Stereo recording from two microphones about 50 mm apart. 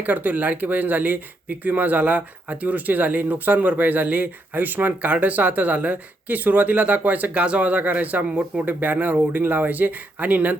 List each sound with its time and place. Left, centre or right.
0.0 s speech: right